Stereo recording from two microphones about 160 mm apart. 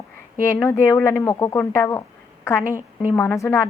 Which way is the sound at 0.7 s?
15° left (ahead or behind).